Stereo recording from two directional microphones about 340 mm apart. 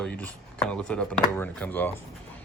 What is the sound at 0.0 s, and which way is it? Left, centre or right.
Speech, centre.